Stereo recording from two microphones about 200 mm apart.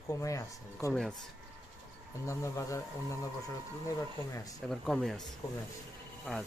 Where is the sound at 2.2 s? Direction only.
15° left (ahead or behind).